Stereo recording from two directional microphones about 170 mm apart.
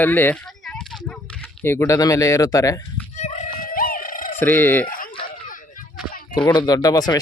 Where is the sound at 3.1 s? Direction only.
45° left (ahead or behind).